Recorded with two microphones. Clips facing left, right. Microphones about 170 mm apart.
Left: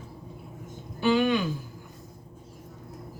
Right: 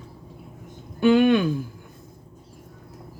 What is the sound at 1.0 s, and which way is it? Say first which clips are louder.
Speech: right 6 dB; 55° right (ahead or behind).